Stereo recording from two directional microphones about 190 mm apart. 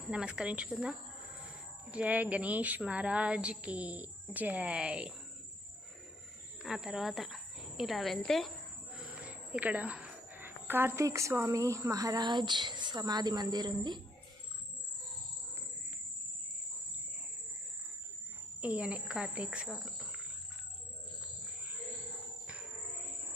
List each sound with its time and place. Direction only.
0.1 s speech: 5° right (ahead or behind)
6.6 s a woman's voice: centre (ahead or behind); by 14.0 s 20° right (ahead or behind)
18.6 s speech: 5° right (ahead or behind)